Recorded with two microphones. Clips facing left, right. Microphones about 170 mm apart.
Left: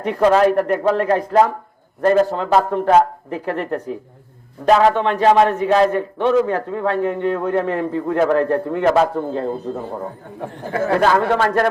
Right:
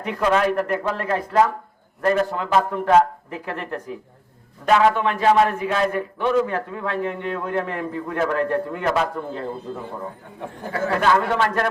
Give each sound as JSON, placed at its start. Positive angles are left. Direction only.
{"t": 0.0, "sound": "a man's voice", "side_deg": 35}
{"t": 10.7, "sound": "a man's voice", "side_deg": 35}